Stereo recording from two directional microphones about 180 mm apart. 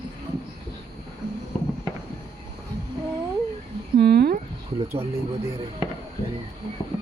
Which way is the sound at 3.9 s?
60° right (ahead or behind).